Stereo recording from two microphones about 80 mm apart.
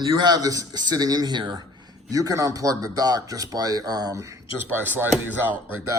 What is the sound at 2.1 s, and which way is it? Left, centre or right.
Speech, right.